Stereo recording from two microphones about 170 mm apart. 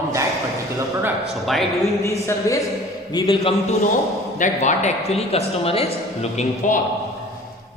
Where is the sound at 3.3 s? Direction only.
35° left (ahead or behind).